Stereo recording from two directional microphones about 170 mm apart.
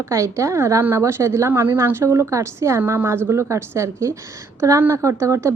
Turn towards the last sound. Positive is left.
turn(degrees=-15)  # may be behind; listen again after turning